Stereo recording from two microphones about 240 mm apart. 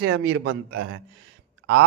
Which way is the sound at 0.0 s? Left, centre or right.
Right.